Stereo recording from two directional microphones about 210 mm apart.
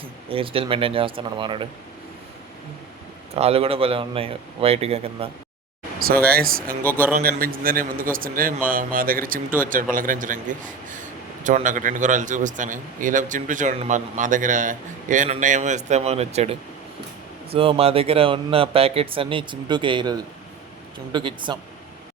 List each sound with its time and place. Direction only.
0.3 s speech: 25° right (ahead or behind)
3.3 s speech: 30° right (ahead or behind)
6.3 s a man's voice: 45° right (ahead or behind)
11.4 s a man's voice: 35° right (ahead or behind); by 21.6 s 20° right (ahead or behind)